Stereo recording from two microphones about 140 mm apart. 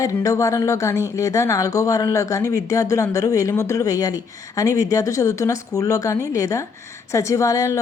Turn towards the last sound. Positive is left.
turn(degrees=25)  # may be behind; listen again after turning